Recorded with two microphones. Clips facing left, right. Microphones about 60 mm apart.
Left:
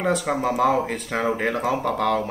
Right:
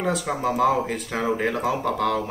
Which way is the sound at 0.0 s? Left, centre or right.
Centre.